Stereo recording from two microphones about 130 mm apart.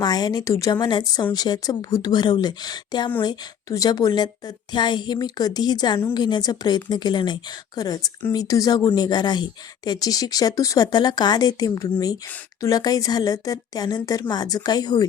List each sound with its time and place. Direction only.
0.0 s a woman's voice: 30° left (ahead or behind)